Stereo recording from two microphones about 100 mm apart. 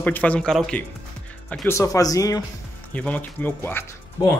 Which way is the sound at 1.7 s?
30° left (ahead or behind).